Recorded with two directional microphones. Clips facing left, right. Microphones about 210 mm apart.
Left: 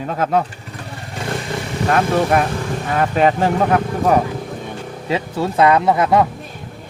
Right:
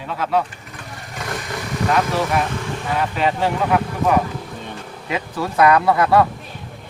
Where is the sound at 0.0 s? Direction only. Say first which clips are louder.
Left 3 dB; 45° left (ahead or behind).